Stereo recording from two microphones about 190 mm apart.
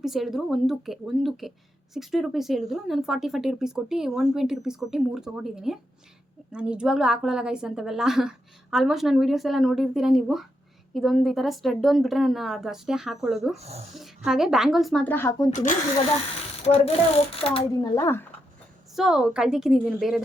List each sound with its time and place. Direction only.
0.0 s speech: centre (ahead or behind)
13.6 s speech: 35° right (ahead or behind)
14.3 s speech: centre (ahead or behind); by 15.4 s 15° left (ahead or behind)
15.4 s ratchet: 40° left (ahead or behind)
16.6 s ratchet: 30° left (ahead or behind)
17.9 s speech: 15° left (ahead or behind)
18.9 s speech: 5° right (ahead or behind)